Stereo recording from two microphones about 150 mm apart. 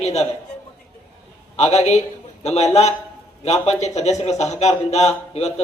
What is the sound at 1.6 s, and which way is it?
Speech, 45° left (ahead or behind).